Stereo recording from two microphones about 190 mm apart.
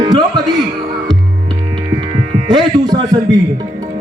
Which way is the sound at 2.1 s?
25° right (ahead or behind).